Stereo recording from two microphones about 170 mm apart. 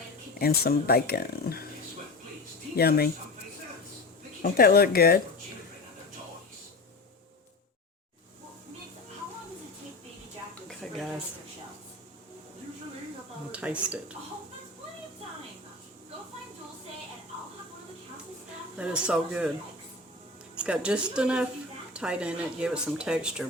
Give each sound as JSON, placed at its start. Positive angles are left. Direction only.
{"t": 0.3, "sound": "speech", "side_deg": 65}
{"t": 2.7, "sound": "speech", "side_deg": 65}
{"t": 4.4, "sound": "speech", "side_deg": 65}
{"t": 10.7, "sound": "a sound", "side_deg": 0}
{"t": 13.5, "sound": "speech", "side_deg": -5}
{"t": 18.8, "sound": "speech", "side_deg": -5}
{"t": 20.7, "sound": "speech", "side_deg": -5}